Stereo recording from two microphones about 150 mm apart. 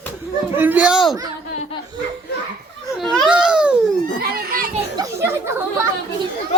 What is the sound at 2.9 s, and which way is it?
Baby cry, centre (ahead or behind).